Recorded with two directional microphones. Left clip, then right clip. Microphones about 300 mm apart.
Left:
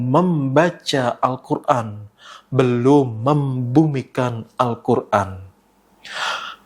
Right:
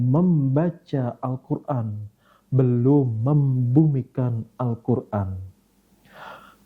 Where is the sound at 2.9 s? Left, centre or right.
Left.